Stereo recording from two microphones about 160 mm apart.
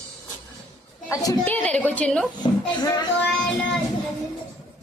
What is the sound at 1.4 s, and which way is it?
Speech, 10° left (ahead or behind).